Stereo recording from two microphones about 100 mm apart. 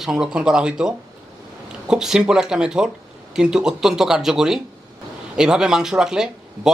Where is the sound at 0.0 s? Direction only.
5° right (ahead or behind).